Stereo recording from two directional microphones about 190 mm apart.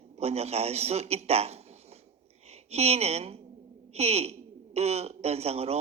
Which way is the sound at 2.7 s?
35° right (ahead or behind).